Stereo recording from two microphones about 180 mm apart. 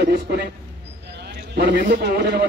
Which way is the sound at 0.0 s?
65° right (ahead or behind).